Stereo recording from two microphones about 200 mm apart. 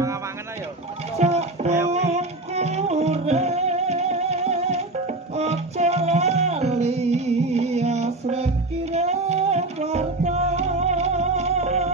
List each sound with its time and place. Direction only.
1.1 s music: 35° right (ahead or behind)